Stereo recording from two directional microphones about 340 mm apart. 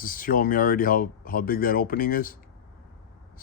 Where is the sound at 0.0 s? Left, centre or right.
Left.